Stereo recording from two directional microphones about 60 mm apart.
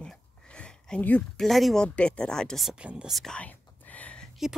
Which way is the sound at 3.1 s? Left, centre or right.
Centre.